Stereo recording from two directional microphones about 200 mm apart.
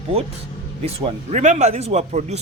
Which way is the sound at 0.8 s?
35° right (ahead or behind).